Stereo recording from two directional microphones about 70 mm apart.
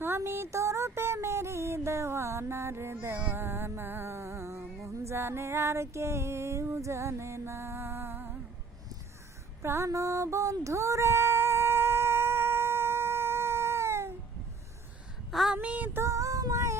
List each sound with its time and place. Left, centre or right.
0.3 s music: right
9.6 s female singing: right
15.3 s a sound: centre
15.5 s female singing: right
16.0 s female singing: right